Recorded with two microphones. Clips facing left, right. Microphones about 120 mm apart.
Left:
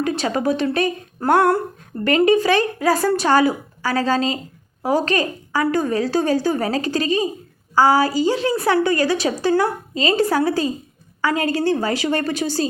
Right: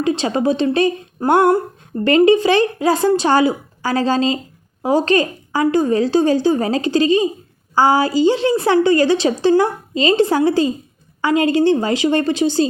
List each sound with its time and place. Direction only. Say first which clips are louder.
0.0 s a woman's voice: right 3 dB; 25° right (ahead or behind)
1.2 s speech: right 3 dB; 15° right (ahead or behind)
2.0 s a woman's voice: right 3 dB; 30° right (ahead or behind)